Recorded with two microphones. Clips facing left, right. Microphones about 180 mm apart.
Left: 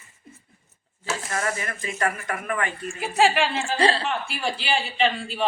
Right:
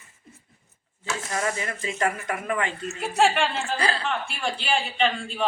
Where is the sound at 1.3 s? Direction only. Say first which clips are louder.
Right 1 dB; 20° right (ahead or behind).